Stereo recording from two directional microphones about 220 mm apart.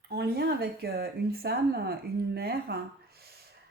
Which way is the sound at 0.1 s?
45° right (ahead or behind).